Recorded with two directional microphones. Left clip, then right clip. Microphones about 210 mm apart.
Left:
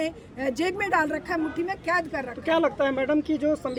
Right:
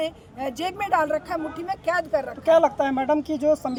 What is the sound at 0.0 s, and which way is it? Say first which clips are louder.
Speech: even; 5° right (ahead or behind).